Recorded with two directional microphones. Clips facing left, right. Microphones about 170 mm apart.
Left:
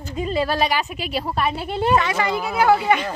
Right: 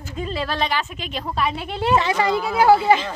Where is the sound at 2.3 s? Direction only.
15° left (ahead or behind).